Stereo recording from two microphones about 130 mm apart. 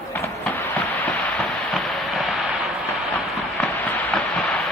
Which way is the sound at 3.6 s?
10° left (ahead or behind).